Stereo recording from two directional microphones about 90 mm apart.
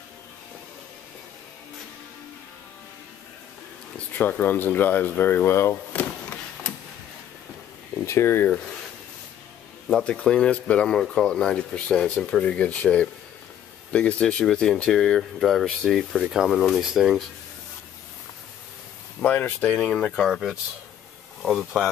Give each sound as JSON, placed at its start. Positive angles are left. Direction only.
{"t": 4.2, "sound": "speech", "side_deg": 20}
{"t": 8.0, "sound": "speech", "side_deg": 30}
{"t": 10.0, "sound": "speech", "side_deg": 10}
{"t": 19.2, "sound": "speech", "side_deg": 20}
{"t": 20.2, "sound": "speech", "side_deg": 0}